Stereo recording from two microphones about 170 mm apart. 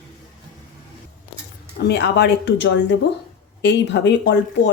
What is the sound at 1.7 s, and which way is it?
Speech, 80° left.